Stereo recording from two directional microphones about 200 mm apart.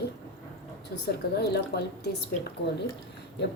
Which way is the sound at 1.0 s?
55° left (ahead or behind).